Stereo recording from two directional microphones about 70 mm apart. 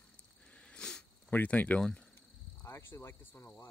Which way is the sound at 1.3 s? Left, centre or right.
Left.